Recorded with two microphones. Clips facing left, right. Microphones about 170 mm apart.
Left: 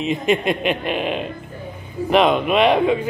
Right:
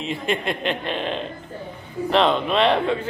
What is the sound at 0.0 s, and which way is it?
A man's voice, 20° left (ahead or behind).